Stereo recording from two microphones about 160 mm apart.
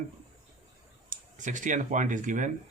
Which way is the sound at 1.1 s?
50° right (ahead or behind).